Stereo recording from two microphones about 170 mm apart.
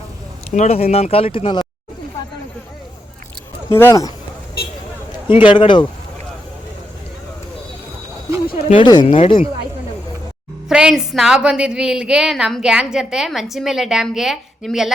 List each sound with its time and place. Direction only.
0.5 s speech: 40° left (ahead or behind)
3.7 s speech: 15° left (ahead or behind)
5.5 s speech: 30° left (ahead or behind)
8.4 s speech: 30° left (ahead or behind)
10.7 s a woman's voice: 5° right (ahead or behind)